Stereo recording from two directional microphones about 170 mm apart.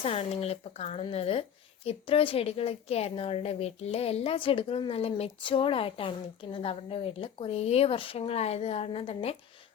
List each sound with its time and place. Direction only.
0.0 s speech: 35° left (ahead or behind)